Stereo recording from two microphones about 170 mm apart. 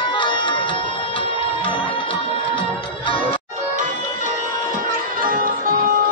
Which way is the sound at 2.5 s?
30° left (ahead or behind).